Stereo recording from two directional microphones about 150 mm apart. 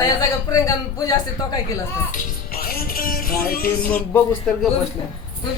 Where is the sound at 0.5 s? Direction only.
25° left (ahead or behind).